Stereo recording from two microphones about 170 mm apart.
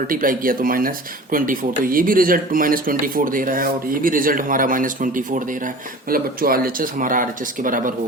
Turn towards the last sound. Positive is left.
turn(degrees=-50)  # may be behind; listen again after turning